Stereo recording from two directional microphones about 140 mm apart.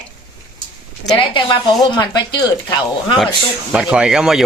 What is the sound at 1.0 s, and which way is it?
Speech, 35° left (ahead or behind).